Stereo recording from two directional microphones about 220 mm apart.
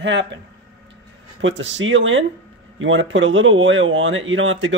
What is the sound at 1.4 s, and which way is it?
Speech, 55° right (ahead or behind).